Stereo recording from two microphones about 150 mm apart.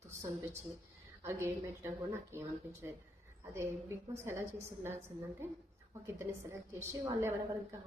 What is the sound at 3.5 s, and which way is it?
Speech, 15° right (ahead or behind).